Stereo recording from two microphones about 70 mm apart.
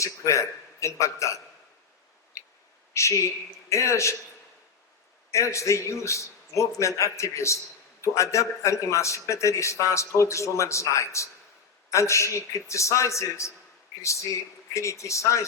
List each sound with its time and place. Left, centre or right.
0.0 s a man's voice: left
2.9 s a man's voice: left
5.3 s a man's voice: left